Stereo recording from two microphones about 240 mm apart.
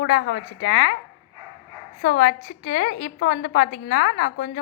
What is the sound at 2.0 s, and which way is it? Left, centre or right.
A woman's voice, left.